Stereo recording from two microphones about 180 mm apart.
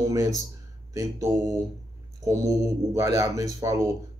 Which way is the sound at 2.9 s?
20° right (ahead or behind).